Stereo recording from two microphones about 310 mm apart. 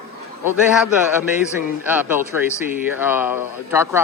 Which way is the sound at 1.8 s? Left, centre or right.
Centre.